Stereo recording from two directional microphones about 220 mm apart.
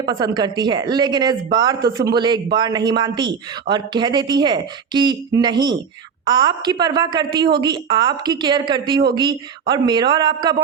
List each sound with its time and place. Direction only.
0.0 s speech: 20° right (ahead or behind)